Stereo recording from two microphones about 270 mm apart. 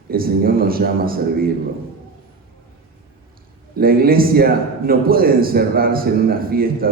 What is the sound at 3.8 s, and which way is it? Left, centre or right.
A man's voice, right.